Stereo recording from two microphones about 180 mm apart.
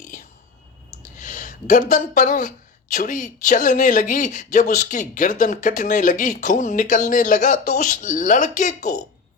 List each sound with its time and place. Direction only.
0.0 s whispering: 45° left (ahead or behind)
1.1 s speech: 45° left (ahead or behind)